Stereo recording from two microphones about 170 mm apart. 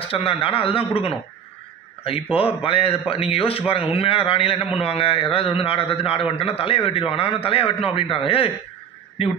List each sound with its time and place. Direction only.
0.0 s a man's voice: 35° left (ahead or behind)
2.3 s a man's voice: 35° left (ahead or behind)